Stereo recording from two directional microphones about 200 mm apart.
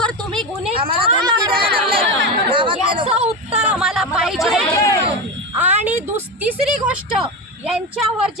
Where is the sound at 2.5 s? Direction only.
25° right (ahead or behind).